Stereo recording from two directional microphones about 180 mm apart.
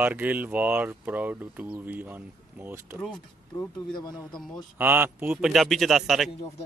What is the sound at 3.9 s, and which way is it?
Speech, 25° left (ahead or behind).